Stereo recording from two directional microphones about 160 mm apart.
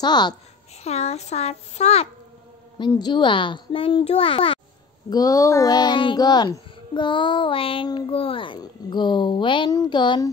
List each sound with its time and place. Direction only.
0.0 s a child's voice: 25° left (ahead or behind)
0.8 s a child's voice: 40° left (ahead or behind)
2.9 s a child's voice: 25° left (ahead or behind)
5.1 s a child's voice: 20° left (ahead or behind)